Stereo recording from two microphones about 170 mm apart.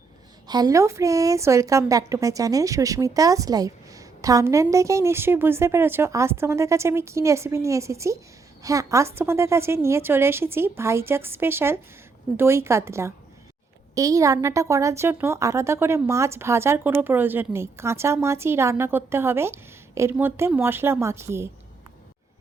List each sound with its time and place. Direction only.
0.4 s a woman's voice: 25° right (ahead or behind)